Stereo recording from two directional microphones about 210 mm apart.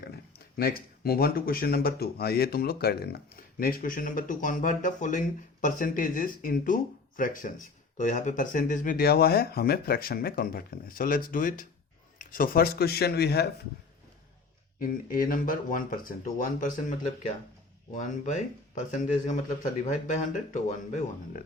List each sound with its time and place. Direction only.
0.0 s speech: 50° left (ahead or behind)
14.8 s speech: 40° left (ahead or behind)